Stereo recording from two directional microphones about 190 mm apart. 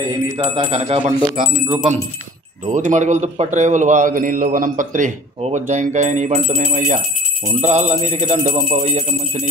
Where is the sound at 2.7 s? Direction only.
40° right (ahead or behind).